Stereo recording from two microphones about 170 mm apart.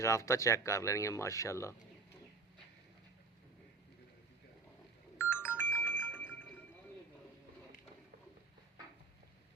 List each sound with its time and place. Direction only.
0.0 s speech: 15° left (ahead or behind)
5.1 s ringtone: 15° left (ahead or behind)